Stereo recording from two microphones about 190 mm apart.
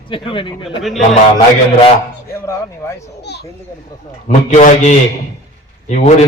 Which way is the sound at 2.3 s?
15° left (ahead or behind).